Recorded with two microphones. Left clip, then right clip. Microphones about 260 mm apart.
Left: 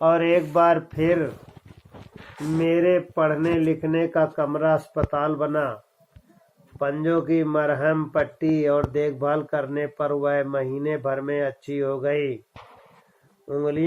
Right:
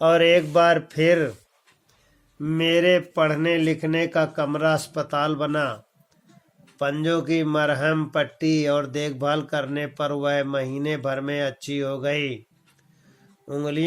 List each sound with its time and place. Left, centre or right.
0.0 s speech: right
2.6 s speech: right
6.7 s speech: right
13.5 s speech: right